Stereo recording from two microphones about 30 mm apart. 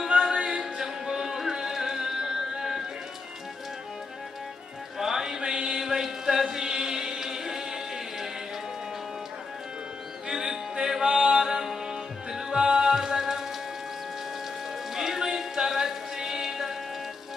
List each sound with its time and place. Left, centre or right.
0.2 s music: centre
4.9 s mantra: centre
5.7 s chant: centre
10.2 s music: centre
11.0 s mantra: right
11.3 s music: centre
12.9 s music: centre
14.9 s music: centre